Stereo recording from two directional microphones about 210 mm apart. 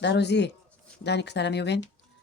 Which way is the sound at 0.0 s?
55° left (ahead or behind).